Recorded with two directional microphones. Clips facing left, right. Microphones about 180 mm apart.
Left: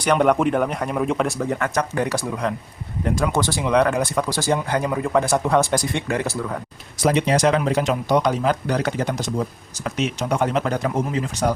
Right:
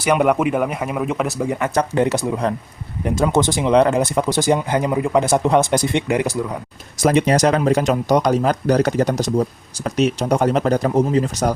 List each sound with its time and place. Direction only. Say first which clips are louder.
0.0 s speech: right 1 dB; 5° right (ahead or behind)
1.7 s speech: right 5 dB; 25° right (ahead or behind)
7.0 s speech: right 3 dB; 45° right (ahead or behind)